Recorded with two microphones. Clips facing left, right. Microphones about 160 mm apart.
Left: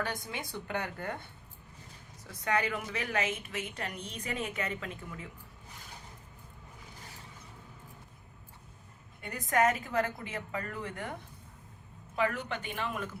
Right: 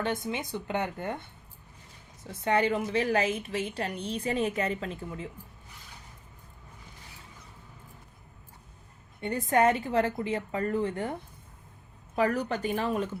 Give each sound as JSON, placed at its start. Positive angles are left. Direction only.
{"t": 0.0, "sound": "a woman's voice", "side_deg": -25}
{"t": 2.2, "sound": "a woman's voice", "side_deg": -30}
{"t": 9.2, "sound": "a woman's voice", "side_deg": -30}
{"t": 12.1, "sound": "a woman's voice", "side_deg": -40}